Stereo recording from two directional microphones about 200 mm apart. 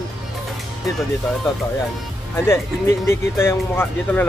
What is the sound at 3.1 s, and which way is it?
Speech, 10° left (ahead or behind).